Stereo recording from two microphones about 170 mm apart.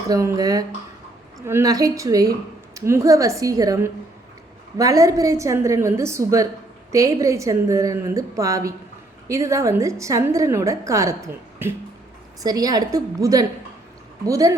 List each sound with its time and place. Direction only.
0.1 s a woman's voice: 20° right (ahead or behind)
4.8 s a woman's voice: 20° right (ahead or behind)